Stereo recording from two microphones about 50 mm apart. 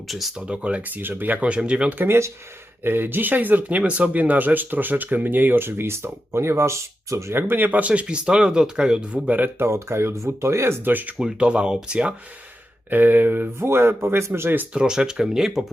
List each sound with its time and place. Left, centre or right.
0.1 s speech: centre
0.3 s speech: right
0.8 s speech: right
1.4 s speech: right
2.0 s speech: right
2.8 s speech: right
7.3 s speech: right
9.6 s speech: right
10.8 s speech: right
11.2 s speech: centre
12.9 s speech: right
13.7 s speech: right
14.7 s speech: centre